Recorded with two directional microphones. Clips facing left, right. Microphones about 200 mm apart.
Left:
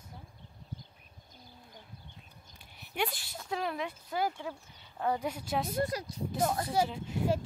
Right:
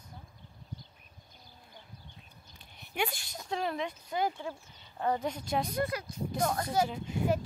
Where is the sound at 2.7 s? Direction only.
5° left (ahead or behind).